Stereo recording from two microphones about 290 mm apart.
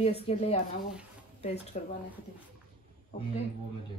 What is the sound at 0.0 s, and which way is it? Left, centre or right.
A woman's voice, left.